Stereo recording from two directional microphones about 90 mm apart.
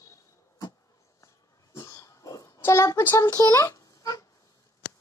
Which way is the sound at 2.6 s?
30° left (ahead or behind).